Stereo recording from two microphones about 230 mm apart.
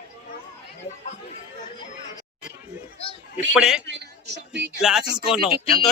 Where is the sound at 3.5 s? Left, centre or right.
Centre.